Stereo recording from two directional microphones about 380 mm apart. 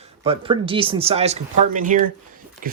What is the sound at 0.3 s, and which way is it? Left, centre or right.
Speech, centre.